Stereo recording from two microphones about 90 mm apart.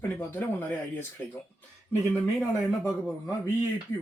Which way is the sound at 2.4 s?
15° right (ahead or behind).